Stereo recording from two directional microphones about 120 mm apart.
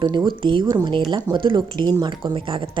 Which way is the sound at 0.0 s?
40° right (ahead or behind).